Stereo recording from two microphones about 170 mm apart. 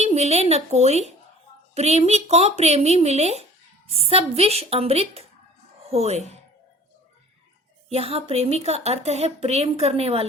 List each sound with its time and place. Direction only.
0.0 s speech: 40° right (ahead or behind)
7.9 s speech: 35° right (ahead or behind)